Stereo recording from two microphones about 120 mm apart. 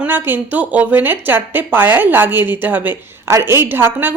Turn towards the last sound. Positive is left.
turn(degrees=-15)  # may be behind; listen again after turning